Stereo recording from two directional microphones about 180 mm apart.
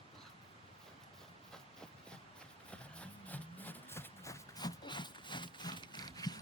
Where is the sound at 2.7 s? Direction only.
5° left (ahead or behind).